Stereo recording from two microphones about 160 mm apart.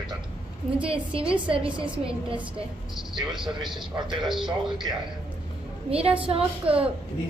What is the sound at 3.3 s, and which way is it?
A man's voice, centre (ahead or behind).